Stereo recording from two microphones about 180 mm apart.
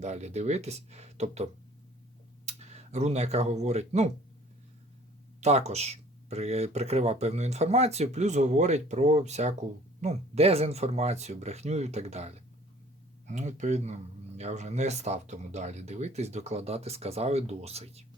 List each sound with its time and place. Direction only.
0.0 s speech: 40° right (ahead or behind)
2.5 s speech: 40° right (ahead or behind)
5.4 s speech: 35° right (ahead or behind)